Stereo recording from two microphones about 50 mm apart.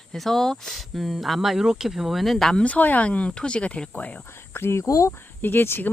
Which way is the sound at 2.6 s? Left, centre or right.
Left.